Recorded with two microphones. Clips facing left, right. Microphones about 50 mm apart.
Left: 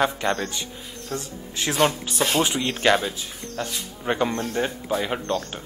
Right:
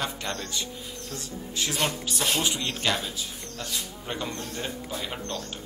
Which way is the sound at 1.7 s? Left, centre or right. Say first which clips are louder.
Left 9 dB; left.